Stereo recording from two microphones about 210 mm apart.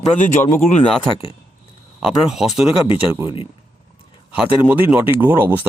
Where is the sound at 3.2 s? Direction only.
25° left (ahead or behind).